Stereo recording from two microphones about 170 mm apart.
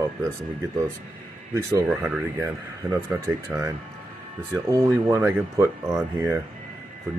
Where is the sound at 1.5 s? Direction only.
15° right (ahead or behind).